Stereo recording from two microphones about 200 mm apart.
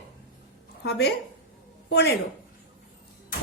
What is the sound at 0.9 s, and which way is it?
A woman's voice, 55° left (ahead or behind).